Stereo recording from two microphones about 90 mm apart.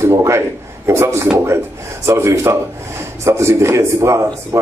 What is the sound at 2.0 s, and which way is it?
A man's voice, 35° right (ahead or behind).